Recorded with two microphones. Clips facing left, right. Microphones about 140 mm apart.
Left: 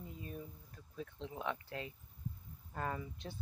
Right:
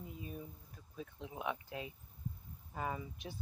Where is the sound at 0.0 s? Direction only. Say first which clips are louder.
Even; 10° right (ahead or behind).